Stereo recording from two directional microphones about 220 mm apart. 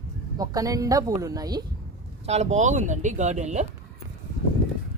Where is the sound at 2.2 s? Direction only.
30° right (ahead or behind).